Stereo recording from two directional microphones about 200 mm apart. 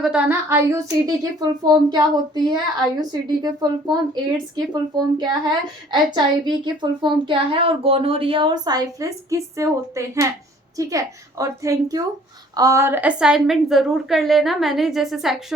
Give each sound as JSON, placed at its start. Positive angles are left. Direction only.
{"t": 0.0, "sound": "a woman's voice", "side_deg": -5}